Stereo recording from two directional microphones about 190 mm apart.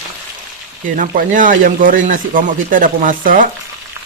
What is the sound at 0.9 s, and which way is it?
Speech, 45° right (ahead or behind).